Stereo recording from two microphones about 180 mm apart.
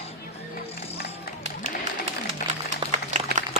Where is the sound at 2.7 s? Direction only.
40° right (ahead or behind).